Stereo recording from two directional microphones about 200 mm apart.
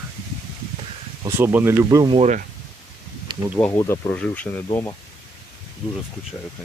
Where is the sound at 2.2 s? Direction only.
35° right (ahead or behind).